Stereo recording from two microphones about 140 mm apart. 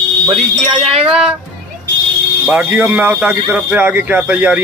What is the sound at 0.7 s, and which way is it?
Speech, 45° right (ahead or behind).